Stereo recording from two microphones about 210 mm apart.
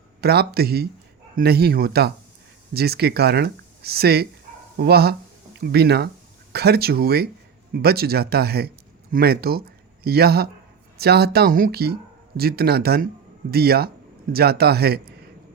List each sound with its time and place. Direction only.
0.2 s speech: 50° right (ahead or behind)